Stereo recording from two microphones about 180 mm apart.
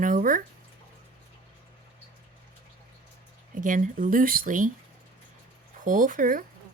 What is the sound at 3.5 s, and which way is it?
Speech, 50° right (ahead or behind).